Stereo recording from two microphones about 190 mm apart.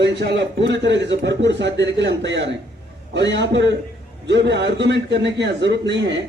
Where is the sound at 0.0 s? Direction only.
65° right (ahead or behind).